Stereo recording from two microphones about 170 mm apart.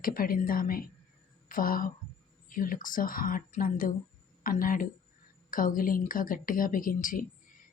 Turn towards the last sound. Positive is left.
turn(degrees=55)  # may be behind; listen again after turning